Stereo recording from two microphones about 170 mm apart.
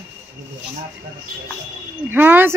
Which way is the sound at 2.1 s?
10° right (ahead or behind).